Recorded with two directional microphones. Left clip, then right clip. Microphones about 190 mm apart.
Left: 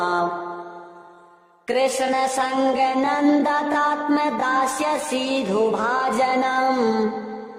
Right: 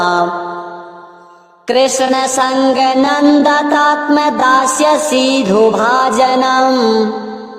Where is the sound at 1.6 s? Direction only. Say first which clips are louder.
Right 9 dB; 35° right (ahead or behind).